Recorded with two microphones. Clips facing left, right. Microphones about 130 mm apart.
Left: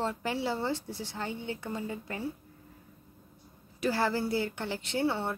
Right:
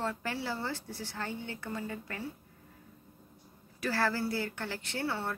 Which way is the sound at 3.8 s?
20° left (ahead or behind).